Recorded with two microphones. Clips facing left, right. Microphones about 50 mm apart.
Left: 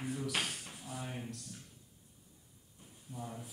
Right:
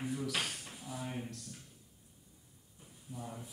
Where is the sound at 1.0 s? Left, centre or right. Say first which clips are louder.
Right 3 dB; centre.